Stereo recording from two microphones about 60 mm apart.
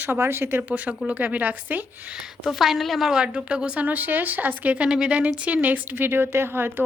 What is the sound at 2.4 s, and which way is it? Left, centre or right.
A woman's voice, centre.